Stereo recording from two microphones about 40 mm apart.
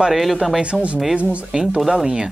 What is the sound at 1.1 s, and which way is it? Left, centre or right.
Speech, right.